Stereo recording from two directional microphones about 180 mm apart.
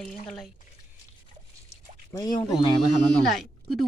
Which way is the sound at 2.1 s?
20° left (ahead or behind).